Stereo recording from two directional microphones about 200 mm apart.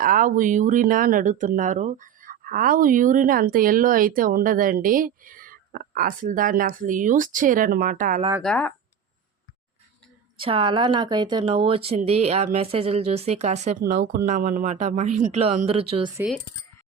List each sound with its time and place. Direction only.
0.0 s speech: 40° right (ahead or behind)
8.4 s speech: 5° left (ahead or behind)
10.3 s speech: 25° right (ahead or behind)